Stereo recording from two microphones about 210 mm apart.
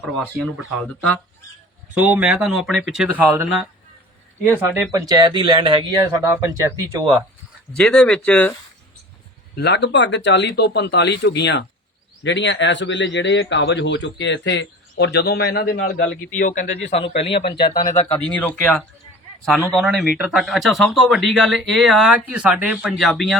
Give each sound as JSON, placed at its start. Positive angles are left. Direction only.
{"t": 0.0, "sound": "speech", "side_deg": -5}
{"t": 4.9, "sound": "speech", "side_deg": -15}
{"t": 7.8, "sound": "speech", "side_deg": 5}
{"t": 9.6, "sound": "speech", "side_deg": 55}
{"t": 18.3, "sound": "speech", "side_deg": 5}